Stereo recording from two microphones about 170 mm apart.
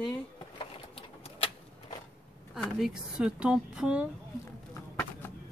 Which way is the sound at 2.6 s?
Centre (ahead or behind).